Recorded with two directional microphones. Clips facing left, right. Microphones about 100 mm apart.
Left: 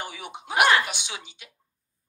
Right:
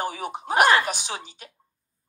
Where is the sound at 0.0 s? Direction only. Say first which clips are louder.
Right 7 dB; 40° right (ahead or behind).